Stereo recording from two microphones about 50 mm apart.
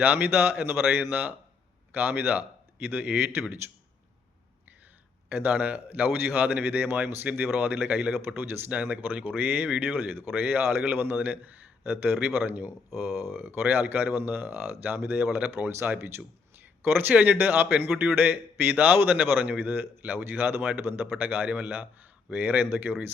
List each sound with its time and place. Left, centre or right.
0.0 s a man's voice: right
5.3 s a man's voice: right
7.9 s a man's voice: right
8.4 s speech: right
8.7 s a man's voice: right
14.1 s a man's voice: right
22.6 s speech: right